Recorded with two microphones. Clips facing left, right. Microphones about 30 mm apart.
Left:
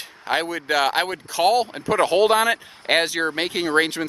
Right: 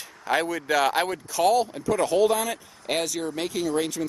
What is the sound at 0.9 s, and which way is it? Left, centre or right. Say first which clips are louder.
Speech: left 2 dB; left.